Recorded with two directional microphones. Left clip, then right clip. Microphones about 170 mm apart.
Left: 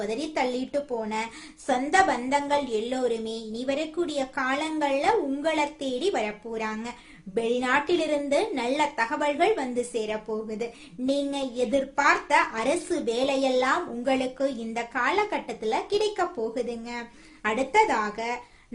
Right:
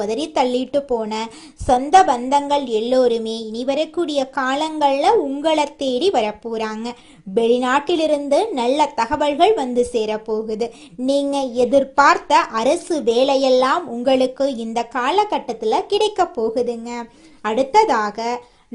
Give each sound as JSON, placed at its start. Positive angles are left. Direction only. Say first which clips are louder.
{"t": 0.0, "sound": "speech", "louder": "right 8 dB", "side_deg": -35}